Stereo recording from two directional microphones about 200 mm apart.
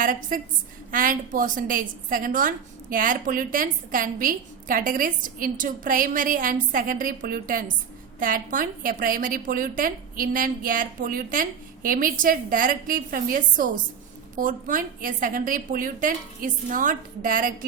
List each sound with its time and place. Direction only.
0.0 s a woman's voice: 40° right (ahead or behind)